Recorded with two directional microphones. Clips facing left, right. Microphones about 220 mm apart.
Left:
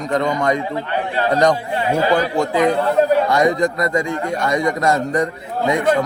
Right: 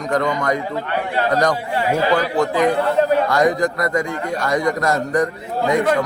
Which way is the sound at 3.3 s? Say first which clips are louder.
Left 1 dB; 25° left (ahead or behind).